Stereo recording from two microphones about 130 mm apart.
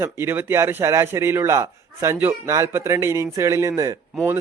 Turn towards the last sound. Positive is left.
turn(degrees=-20)  # may be behind; listen again after turning